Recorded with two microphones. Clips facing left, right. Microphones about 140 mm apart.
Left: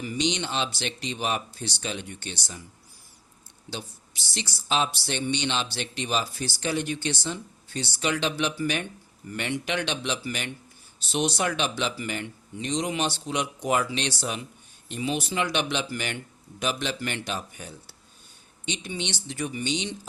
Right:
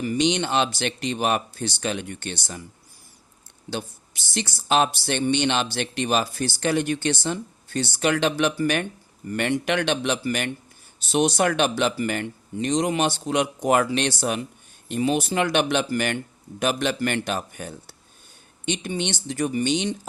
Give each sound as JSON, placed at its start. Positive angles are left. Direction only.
{"t": 0.0, "sound": "speech", "side_deg": -55}
{"t": 4.4, "sound": "speech", "side_deg": -55}